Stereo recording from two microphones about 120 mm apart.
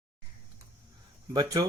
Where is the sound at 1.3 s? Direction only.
35° right (ahead or behind).